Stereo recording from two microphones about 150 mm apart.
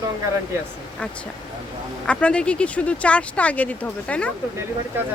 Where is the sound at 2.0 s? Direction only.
10° left (ahead or behind).